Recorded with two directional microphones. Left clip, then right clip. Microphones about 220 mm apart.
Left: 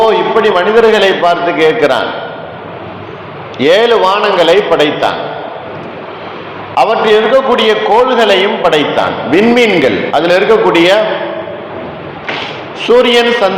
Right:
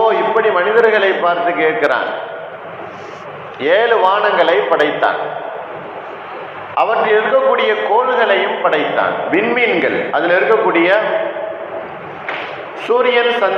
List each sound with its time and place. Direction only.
0.0 s a man's voice: 50° left (ahead or behind)
3.6 s a man's voice: 50° left (ahead or behind)
6.7 s a man's voice: 50° left (ahead or behind)
12.8 s a man's voice: 45° left (ahead or behind)